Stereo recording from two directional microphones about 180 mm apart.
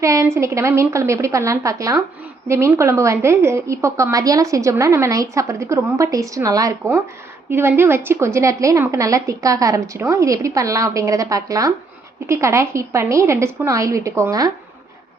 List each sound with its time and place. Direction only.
0.0 s a woman's voice: 15° right (ahead or behind)